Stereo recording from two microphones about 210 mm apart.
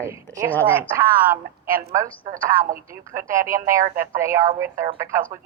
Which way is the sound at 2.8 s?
15° right (ahead or behind).